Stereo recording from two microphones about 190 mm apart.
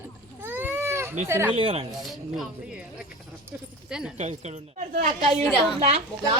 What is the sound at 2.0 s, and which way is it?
Speech, centre (ahead or behind).